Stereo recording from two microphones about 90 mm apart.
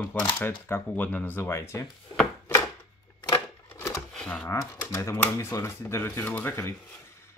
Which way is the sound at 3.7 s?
35° left (ahead or behind).